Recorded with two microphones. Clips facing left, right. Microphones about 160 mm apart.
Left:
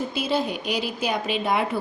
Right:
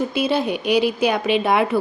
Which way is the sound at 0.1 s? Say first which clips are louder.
Right 5 dB; 65° right (ahead or behind).